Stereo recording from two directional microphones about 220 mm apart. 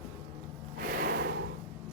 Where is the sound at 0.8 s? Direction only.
40° right (ahead or behind).